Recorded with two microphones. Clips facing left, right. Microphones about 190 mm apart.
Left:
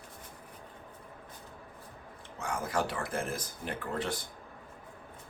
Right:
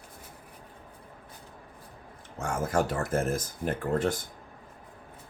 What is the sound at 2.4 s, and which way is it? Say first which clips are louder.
Speech: right 5 dB; 45° right (ahead or behind).